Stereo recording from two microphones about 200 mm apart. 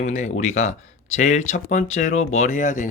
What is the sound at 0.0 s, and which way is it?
Speech, 35° left (ahead or behind).